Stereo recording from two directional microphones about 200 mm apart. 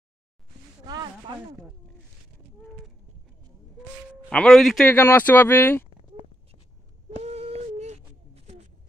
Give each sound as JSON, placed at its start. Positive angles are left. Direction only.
{"t": 0.8, "sound": "speech", "side_deg": -20}
{"t": 4.3, "sound": "speech", "side_deg": 5}
{"t": 7.2, "sound": "a sound", "side_deg": -30}